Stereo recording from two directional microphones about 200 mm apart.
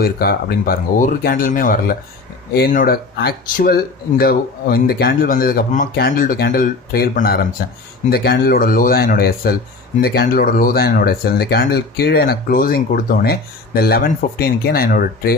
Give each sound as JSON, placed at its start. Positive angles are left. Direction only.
{"t": 0.0, "sound": "speech", "side_deg": 50}